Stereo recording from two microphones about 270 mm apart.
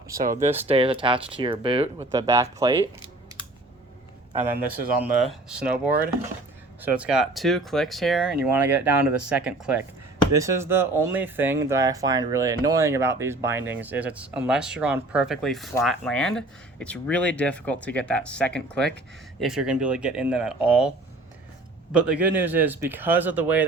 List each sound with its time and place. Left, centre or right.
0.2 s speech: right; by 2.7 s centre
4.9 s speech: centre
21.9 s speech: centre